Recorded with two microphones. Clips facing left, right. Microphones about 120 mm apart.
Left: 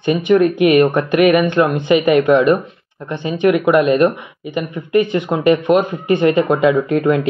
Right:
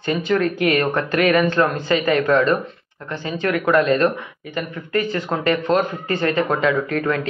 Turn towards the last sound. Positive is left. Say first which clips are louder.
# left 6 dB
turn(degrees=20)  # may be behind; listen again after turning